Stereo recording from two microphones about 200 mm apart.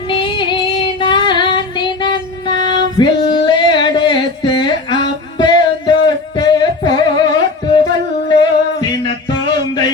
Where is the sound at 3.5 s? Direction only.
25° left (ahead or behind).